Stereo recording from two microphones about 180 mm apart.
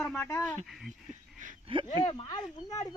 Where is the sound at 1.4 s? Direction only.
45° right (ahead or behind).